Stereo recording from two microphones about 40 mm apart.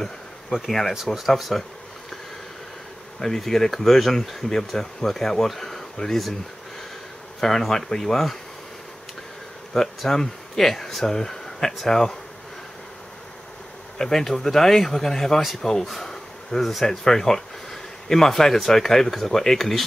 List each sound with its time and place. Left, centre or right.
0.5 s speech: centre
1.1 s speech: left
1.5 s speech: centre
3.2 s speech: centre
7.3 s speech: centre
9.8 s speech: centre
13.9 s speech: centre